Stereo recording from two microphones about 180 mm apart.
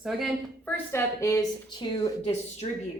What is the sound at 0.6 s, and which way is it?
Speech, 10° left (ahead or behind).